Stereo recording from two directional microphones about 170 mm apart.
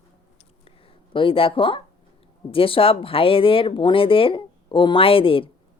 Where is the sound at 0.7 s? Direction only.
30° left (ahead or behind).